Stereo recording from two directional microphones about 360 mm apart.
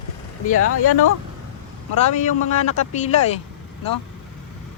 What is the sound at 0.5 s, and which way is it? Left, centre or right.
Speech, left.